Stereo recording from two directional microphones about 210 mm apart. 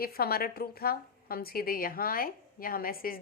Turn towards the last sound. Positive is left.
turn(degrees=45)  # may be behind; listen again after turning